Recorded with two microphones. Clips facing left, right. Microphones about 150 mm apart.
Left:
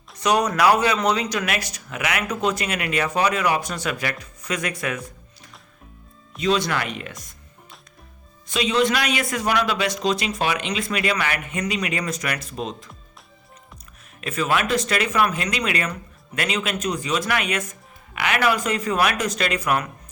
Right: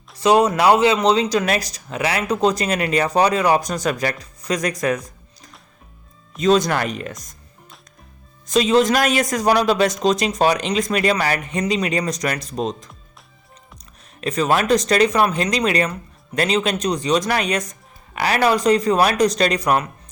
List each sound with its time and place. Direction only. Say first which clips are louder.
0.2 s speech: right 4 dB; 25° right (ahead or behind)
8.4 s speech: right 5 dB; 40° right (ahead or behind)
14.2 s speech: right 4 dB; 35° right (ahead or behind)